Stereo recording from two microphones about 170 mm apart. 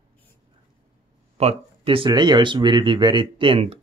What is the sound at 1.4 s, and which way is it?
Speech, 35° right (ahead or behind).